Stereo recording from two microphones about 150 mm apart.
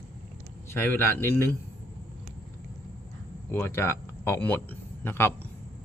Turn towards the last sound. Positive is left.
turn(degrees=15)  # may be behind; listen again after turning